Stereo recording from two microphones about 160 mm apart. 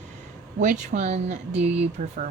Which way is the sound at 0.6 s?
50° right (ahead or behind).